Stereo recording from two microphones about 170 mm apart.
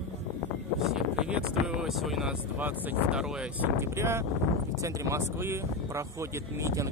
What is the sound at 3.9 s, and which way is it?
Speech, 15° right (ahead or behind).